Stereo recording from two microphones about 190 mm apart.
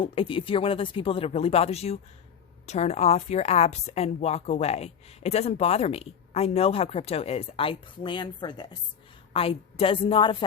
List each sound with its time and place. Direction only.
0.0 s a woman's voice: 30° left (ahead or behind)